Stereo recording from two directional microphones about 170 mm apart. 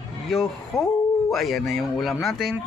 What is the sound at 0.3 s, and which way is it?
Speech, centre (ahead or behind).